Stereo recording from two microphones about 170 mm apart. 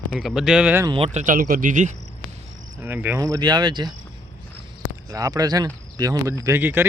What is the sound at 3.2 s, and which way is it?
Speech, 25° right (ahead or behind).